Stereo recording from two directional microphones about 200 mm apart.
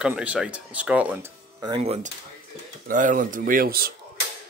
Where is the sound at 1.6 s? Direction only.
25° right (ahead or behind).